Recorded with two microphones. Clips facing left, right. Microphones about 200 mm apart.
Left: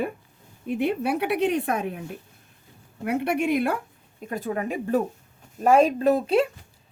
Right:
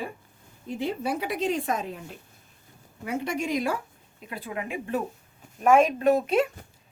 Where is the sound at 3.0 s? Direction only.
60° left (ahead or behind).